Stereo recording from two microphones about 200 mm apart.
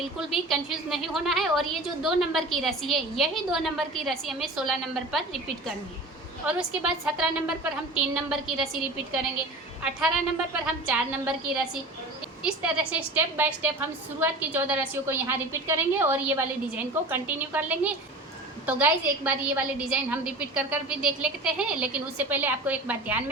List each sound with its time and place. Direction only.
0.3 s a woman's voice: centre (ahead or behind)
6.4 s a woman's voice: 10° right (ahead or behind)
10.8 s a woman's voice: 5° right (ahead or behind)